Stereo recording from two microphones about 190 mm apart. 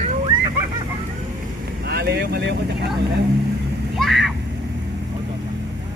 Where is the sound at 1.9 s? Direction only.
60° right (ahead or behind).